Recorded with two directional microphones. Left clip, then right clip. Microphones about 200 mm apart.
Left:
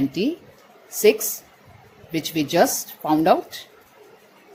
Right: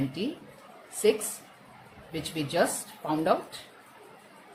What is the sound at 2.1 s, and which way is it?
Speech, 30° left (ahead or behind).